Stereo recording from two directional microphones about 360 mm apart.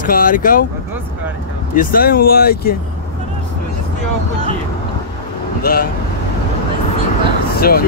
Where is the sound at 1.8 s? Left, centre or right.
Left.